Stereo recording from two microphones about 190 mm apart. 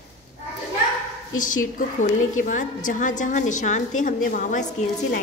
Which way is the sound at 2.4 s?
40° left (ahead or behind).